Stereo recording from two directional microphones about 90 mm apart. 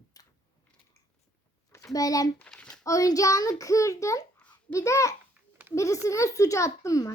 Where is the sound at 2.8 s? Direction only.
40° left (ahead or behind).